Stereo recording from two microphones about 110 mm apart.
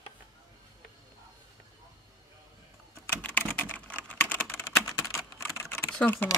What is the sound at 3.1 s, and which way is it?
Typing, 15° left (ahead or behind).